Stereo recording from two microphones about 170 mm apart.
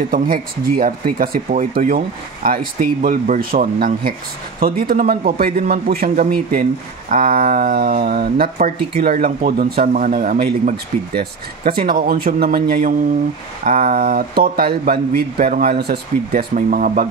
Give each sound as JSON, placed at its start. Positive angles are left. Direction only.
{"t": 0.1, "sound": "speech", "side_deg": -55}